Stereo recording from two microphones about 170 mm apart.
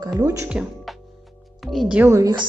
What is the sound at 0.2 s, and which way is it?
Speech, 15° right (ahead or behind).